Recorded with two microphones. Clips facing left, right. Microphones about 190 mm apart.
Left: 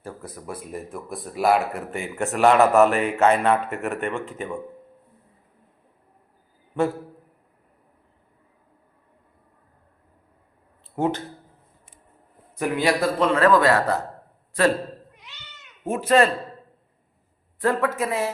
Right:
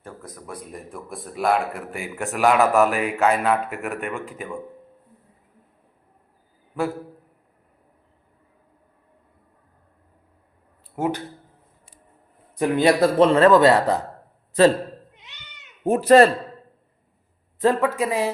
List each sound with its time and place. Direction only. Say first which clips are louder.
0.0 s speech: left 3 dB; 10° left (ahead or behind)
10.9 s speech: left 1 dB; 10° right (ahead or behind)
12.5 s speech: right 4 dB; 25° right (ahead or behind)
15.1 s cat: left 2 dB; 20° right (ahead or behind)
15.8 s speech: right 5 dB; 35° right (ahead or behind)
17.6 s speech: right 3 dB; 15° right (ahead or behind)